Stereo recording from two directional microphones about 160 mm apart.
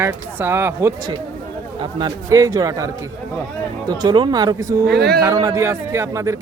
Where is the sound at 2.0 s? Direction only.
20° right (ahead or behind).